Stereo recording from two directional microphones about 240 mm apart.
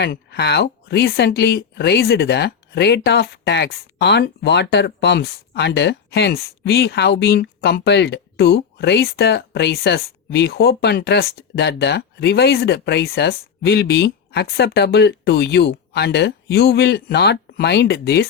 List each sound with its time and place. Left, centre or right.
0.0 s speech: left